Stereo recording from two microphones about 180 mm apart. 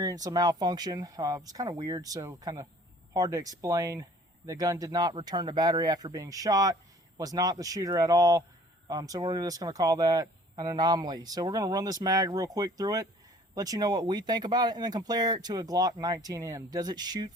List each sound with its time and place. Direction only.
0.0 s speech: 20° right (ahead or behind)